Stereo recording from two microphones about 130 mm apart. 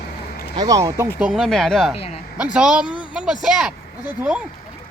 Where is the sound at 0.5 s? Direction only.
30° right (ahead or behind).